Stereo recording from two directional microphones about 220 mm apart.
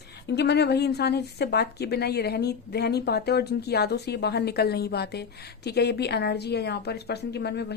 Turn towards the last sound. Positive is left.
turn(degrees=50)  # may be behind; listen again after turning